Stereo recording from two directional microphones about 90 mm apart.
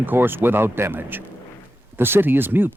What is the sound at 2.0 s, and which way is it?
Speech, 25° right (ahead or behind).